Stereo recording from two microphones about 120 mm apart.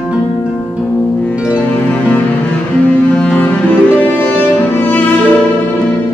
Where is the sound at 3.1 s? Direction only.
10° left (ahead or behind).